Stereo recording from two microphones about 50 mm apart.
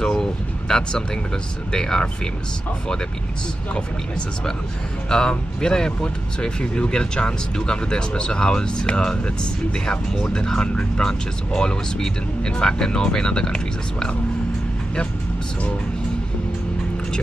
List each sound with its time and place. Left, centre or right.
0.0 s a sound: centre
1.7 s speech: centre
5.1 s speech: centre